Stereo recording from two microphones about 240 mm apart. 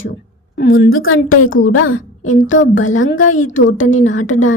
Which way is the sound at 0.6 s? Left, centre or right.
Left.